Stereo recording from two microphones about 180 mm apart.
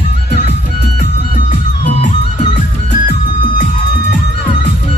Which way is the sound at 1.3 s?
45° left (ahead or behind).